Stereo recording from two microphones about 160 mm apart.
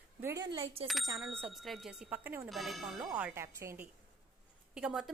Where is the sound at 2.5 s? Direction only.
Centre (ahead or behind).